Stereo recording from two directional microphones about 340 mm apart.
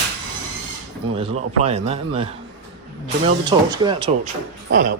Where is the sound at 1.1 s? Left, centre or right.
Centre.